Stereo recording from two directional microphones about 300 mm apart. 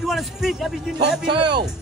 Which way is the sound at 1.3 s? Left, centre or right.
Right.